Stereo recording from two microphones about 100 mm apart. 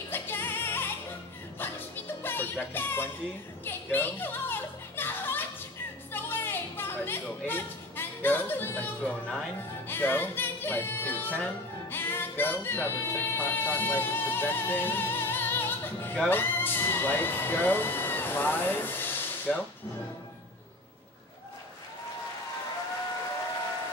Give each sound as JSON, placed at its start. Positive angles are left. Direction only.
{"t": 0.1, "sound": "music", "side_deg": 20}
{"t": 16.3, "sound": "speech", "side_deg": 20}